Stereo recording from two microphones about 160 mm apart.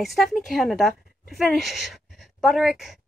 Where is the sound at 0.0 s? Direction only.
Centre (ahead or behind).